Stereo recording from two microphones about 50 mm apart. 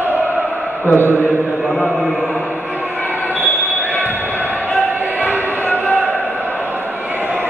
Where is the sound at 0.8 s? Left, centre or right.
Left.